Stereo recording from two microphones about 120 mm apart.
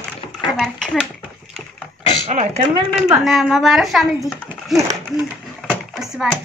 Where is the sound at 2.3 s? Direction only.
70° right (ahead or behind).